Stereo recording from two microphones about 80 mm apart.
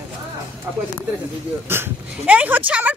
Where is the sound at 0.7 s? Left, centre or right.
Right.